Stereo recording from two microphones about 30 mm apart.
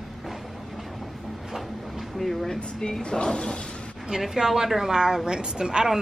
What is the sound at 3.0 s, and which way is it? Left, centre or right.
Speech, left.